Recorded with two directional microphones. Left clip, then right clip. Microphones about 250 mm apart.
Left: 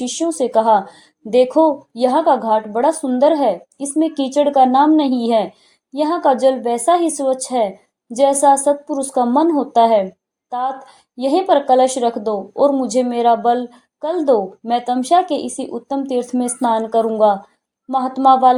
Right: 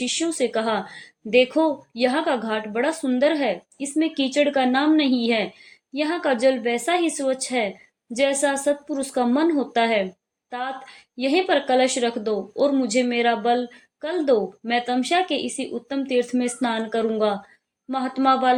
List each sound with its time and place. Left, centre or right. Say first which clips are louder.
0.0 s speech: left 4 dB; centre
11.2 s speech: left 6 dB; centre